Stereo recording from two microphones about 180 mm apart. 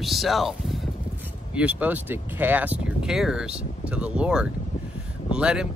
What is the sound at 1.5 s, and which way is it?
Speech, 5° right (ahead or behind).